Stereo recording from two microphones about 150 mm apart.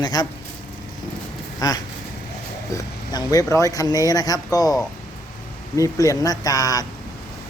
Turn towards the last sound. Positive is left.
turn(degrees=25)  # may be behind; listen again after turning